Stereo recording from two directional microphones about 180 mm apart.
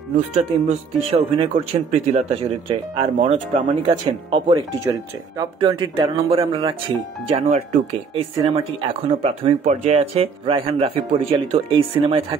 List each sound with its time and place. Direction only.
0.4 s speech: 35° right (ahead or behind)
8.1 s speech: 30° right (ahead or behind)